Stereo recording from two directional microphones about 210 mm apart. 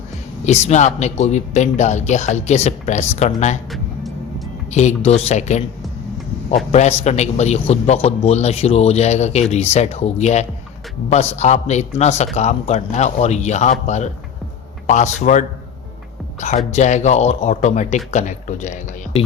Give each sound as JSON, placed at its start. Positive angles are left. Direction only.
{"t": 0.4, "sound": "a man's voice", "side_deg": 30}
{"t": 4.7, "sound": "a man's voice", "side_deg": 35}
{"t": 6.7, "sound": "a man's voice", "side_deg": 30}